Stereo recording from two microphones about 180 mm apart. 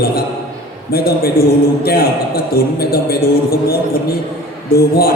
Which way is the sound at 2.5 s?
55° left (ahead or behind).